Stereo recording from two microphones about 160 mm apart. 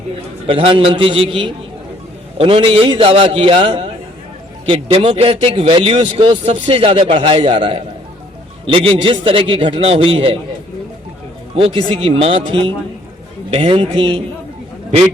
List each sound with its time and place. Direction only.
0.4 s a man's voice: 35° right (ahead or behind)
11.5 s a man's voice: 35° right (ahead or behind)